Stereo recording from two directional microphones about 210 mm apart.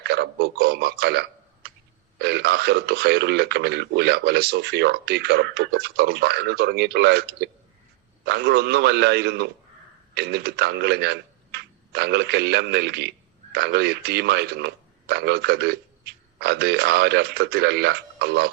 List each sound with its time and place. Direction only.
0.0 s speech: 50° right (ahead or behind)